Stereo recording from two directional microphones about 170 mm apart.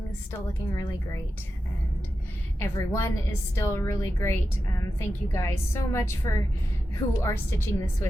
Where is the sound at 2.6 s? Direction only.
15° left (ahead or behind).